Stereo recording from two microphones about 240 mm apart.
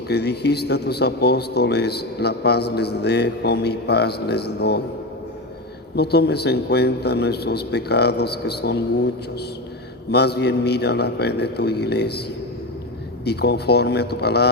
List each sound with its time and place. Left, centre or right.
0.1 s speech: left
6.0 s speech: left
10.1 s speech: left
13.2 s speech: left